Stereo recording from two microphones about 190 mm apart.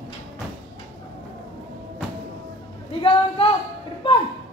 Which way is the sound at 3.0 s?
30° left (ahead or behind).